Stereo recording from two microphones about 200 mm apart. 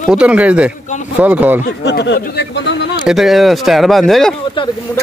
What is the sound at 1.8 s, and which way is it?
Speech, 60° left (ahead or behind).